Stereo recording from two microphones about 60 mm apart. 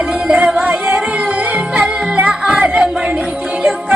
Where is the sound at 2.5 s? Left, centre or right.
Centre.